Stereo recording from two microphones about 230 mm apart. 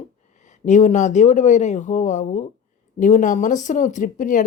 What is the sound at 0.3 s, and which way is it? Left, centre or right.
Speech, left.